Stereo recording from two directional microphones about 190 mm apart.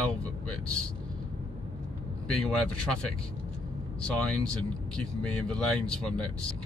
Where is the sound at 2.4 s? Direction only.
5° left (ahead or behind).